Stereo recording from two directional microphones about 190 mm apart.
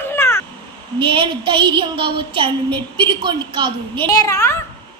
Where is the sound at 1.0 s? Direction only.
25° right (ahead or behind).